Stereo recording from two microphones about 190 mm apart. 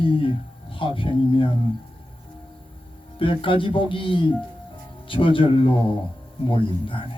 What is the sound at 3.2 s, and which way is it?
Speech, 25° left (ahead or behind).